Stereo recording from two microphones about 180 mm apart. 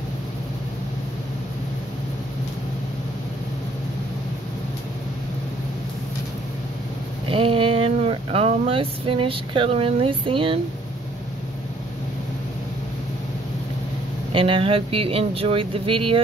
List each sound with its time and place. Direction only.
7.2 s speech: 30° right (ahead or behind)
14.3 s speech: 30° right (ahead or behind)